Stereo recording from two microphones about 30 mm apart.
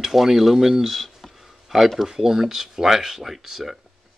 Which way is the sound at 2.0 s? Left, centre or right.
Centre.